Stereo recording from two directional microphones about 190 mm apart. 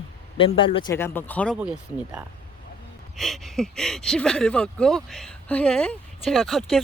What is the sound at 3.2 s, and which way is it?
Speech, centre (ahead or behind).